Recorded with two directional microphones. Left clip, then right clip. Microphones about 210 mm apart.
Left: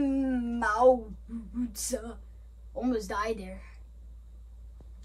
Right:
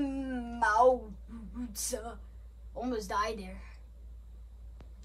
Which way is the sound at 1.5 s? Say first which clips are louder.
Left 4 dB; 15° right (ahead or behind).